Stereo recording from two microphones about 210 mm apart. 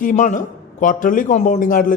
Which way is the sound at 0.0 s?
35° left (ahead or behind).